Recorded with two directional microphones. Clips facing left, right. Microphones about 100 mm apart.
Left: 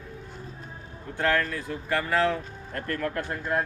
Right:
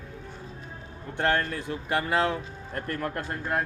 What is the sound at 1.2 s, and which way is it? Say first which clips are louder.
Speech: even; 30° right (ahead or behind).